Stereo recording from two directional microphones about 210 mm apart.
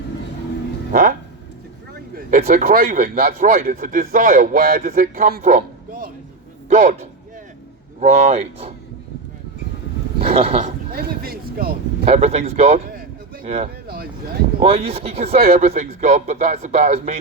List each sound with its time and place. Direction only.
2.1 s a man's voice: 45° right (ahead or behind)
10.2 s a sound: 30° right (ahead or behind)
10.9 s speech: 45° right (ahead or behind)
12.0 s speech: 30° right (ahead or behind)
13.8 s vehicle: 45° right (ahead or behind)
14.6 s speech: 30° right (ahead or behind)
15.3 s speech: 45° right (ahead or behind)
15.7 s a man's voice: 35° right (ahead or behind)